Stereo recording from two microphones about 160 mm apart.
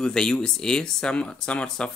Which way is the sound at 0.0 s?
5° left (ahead or behind).